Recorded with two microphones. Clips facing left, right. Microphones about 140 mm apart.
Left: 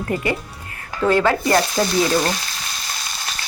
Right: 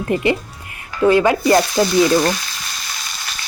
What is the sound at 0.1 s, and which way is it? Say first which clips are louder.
Speech: right 6 dB; 20° right (ahead or behind).